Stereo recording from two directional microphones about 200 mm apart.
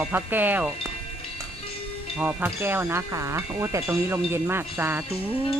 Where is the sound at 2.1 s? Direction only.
10° right (ahead or behind).